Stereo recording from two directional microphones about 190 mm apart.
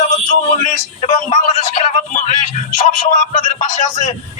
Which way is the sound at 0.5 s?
40° left (ahead or behind).